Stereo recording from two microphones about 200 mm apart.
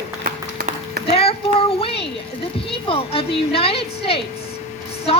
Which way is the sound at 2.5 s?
30° left (ahead or behind).